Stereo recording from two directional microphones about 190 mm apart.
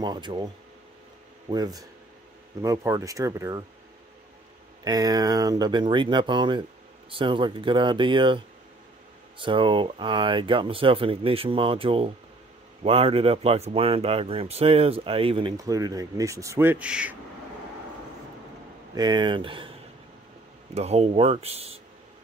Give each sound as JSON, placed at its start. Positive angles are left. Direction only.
{"t": 0.0, "sound": "speech", "side_deg": -25}
{"t": 1.5, "sound": "speech", "side_deg": -20}
{"t": 4.8, "sound": "speech", "side_deg": -20}
{"t": 9.4, "sound": "speech", "side_deg": -25}
{"t": 18.9, "sound": "speech", "side_deg": -25}